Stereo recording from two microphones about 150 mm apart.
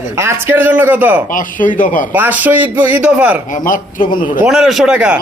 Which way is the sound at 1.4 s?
60° left (ahead or behind).